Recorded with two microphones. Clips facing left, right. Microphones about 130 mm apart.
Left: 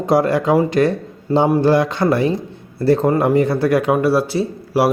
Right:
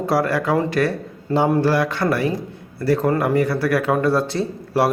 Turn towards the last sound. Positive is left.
turn(degrees=5)  # may be behind; listen again after turning